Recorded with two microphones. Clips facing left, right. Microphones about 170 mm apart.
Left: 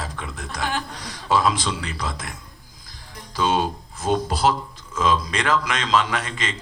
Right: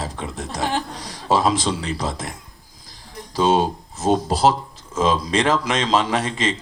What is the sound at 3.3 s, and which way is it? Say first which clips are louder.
A man's voice: right 4 dB; 30° right (ahead or behind).